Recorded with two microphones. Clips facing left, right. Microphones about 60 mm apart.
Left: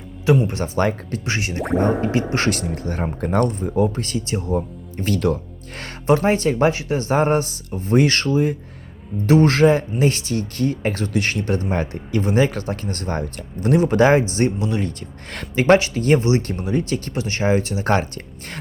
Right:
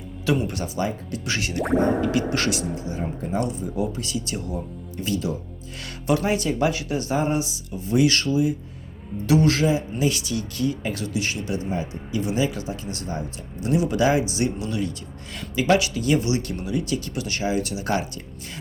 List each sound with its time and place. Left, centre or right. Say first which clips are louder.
0.4 s speech: left 4 dB; left
0.8 s speech: left 7 dB; left
1.3 s speech: left 1 dB; left
2.5 s speech: left 3 dB; left
4.3 s speech: left 7 dB; left
5.1 s speech: left 6 dB; left
6.1 s speech: left 5 dB; left